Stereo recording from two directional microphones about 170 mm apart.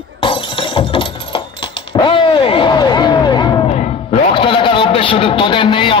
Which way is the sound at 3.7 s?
35° left (ahead or behind).